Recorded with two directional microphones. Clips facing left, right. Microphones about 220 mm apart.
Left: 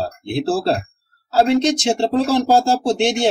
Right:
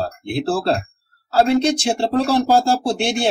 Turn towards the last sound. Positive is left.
turn(degrees=20)  # may be behind; listen again after turning